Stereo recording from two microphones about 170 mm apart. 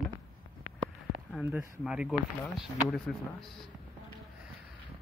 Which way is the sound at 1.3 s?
5° right (ahead or behind).